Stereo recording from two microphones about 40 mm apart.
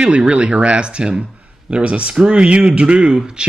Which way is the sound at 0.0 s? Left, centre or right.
Right.